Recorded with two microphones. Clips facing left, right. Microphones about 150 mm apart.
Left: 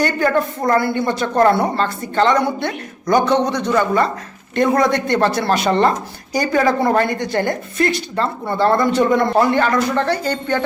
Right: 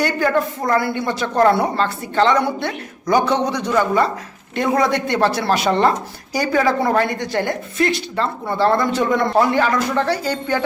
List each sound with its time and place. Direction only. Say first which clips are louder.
0.0 s a woman's voice: left 1 dB; 5° right (ahead or behind)